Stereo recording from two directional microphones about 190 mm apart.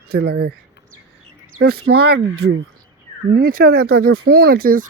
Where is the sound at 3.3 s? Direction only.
50° right (ahead or behind).